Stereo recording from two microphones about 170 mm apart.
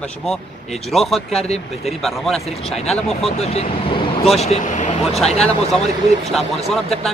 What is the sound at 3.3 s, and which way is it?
Vehicle, 40° left (ahead or behind).